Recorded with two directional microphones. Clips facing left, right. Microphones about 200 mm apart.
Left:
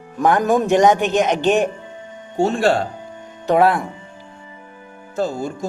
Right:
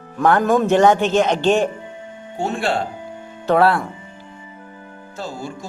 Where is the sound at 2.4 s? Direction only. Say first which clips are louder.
Left 6 dB; 45° left (ahead or behind).